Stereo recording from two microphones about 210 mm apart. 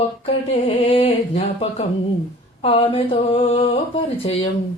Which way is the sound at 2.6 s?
25° left (ahead or behind).